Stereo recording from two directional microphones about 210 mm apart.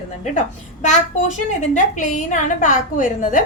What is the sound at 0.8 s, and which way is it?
A woman's voice, 35° left (ahead or behind).